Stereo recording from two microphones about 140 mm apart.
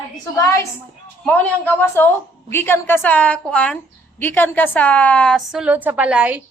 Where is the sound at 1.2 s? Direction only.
10° left (ahead or behind).